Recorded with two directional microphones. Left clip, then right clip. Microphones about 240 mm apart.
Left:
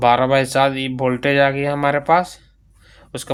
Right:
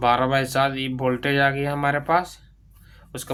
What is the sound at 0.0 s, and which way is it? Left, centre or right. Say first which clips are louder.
Speech: left 5 dB; left.